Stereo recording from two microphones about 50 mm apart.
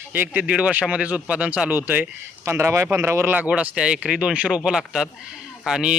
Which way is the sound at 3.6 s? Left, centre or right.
Centre.